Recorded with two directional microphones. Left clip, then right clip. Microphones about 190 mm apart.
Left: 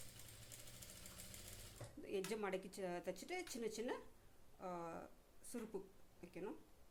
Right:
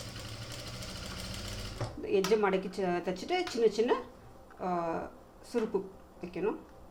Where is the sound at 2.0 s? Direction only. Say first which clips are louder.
Right 17 dB; 55° left (ahead or behind).